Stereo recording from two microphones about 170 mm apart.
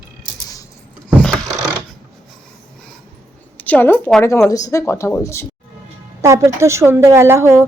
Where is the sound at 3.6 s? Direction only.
10° left (ahead or behind).